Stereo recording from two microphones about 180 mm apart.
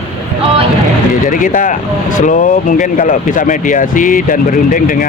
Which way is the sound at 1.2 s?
45° left (ahead or behind).